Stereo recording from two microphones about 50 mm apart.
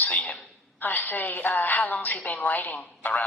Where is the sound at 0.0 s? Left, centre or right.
Left.